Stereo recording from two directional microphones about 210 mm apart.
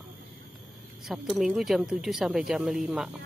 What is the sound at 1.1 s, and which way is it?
Speech, centre (ahead or behind).